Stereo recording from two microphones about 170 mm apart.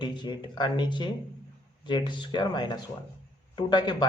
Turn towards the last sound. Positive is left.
turn(degrees=25)  # may be behind; listen again after turning